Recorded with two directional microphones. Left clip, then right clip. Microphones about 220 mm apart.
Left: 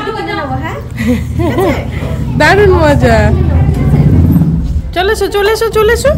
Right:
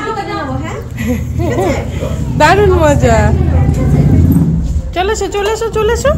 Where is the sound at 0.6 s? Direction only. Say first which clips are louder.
Left 3 dB; 20° left (ahead or behind).